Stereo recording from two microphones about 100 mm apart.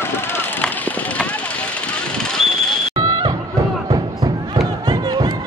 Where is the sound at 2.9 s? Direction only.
40° right (ahead or behind).